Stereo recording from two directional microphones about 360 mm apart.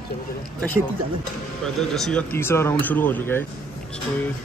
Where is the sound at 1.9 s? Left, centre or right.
Centre.